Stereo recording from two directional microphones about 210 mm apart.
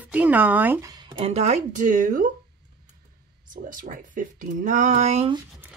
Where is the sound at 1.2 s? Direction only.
30° right (ahead or behind).